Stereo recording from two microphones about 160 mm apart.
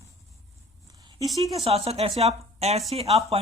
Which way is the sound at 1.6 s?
40° right (ahead or behind).